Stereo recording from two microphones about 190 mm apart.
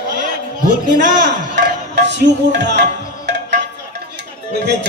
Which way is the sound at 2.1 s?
65° right (ahead or behind).